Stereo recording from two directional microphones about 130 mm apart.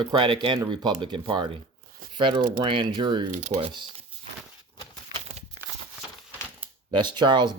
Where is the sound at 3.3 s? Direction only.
55° right (ahead or behind).